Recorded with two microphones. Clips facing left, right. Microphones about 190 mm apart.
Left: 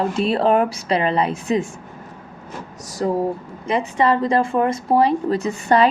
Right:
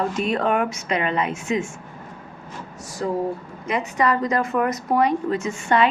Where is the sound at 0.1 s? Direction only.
30° left (ahead or behind).